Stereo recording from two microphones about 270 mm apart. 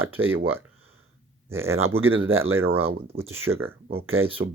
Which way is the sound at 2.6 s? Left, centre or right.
Right.